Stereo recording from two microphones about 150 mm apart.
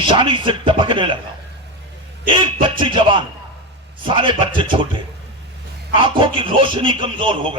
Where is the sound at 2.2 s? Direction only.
35° right (ahead or behind).